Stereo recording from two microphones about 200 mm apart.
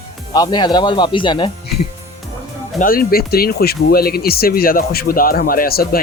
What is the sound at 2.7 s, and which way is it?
Speech, 45° left (ahead or behind).